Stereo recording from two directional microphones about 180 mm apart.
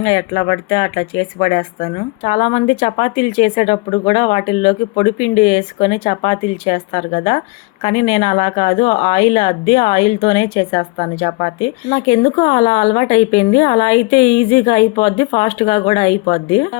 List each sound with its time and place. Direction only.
0.0 s speech: 30° left (ahead or behind)